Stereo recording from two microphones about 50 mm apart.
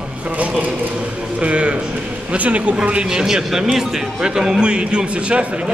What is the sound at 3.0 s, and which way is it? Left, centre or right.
A man's voice, centre.